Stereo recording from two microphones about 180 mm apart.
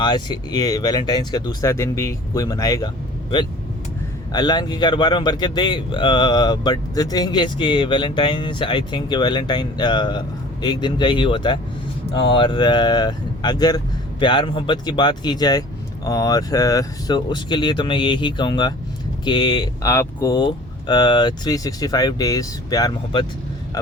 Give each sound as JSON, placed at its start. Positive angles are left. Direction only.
{"t": 0.0, "sound": "speech", "side_deg": 25}
{"t": 4.3, "sound": "speech", "side_deg": 25}